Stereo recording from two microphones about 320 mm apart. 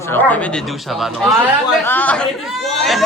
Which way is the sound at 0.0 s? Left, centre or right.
Centre.